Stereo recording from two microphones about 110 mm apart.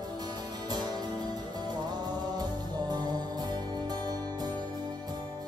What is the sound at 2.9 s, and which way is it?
Music, 40° right (ahead or behind).